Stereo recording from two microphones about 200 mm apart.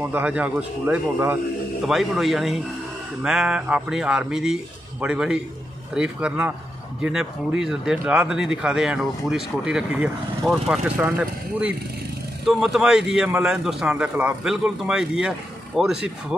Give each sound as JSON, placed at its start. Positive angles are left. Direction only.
{"t": 0.0, "sound": "speech", "side_deg": -10}